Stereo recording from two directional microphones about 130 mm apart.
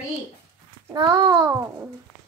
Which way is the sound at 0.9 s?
35° right (ahead or behind).